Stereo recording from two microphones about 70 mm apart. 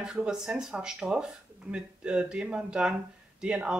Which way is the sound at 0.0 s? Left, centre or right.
Centre.